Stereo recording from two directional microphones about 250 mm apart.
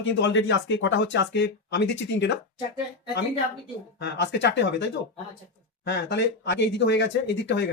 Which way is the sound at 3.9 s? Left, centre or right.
Left.